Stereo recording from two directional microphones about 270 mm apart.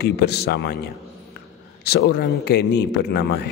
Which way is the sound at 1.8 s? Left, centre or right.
Left.